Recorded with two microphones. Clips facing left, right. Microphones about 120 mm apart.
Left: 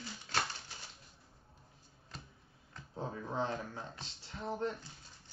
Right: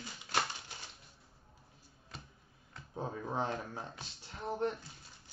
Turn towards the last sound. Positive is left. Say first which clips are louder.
# even
turn(degrees=-10)  # may be behind; listen again after turning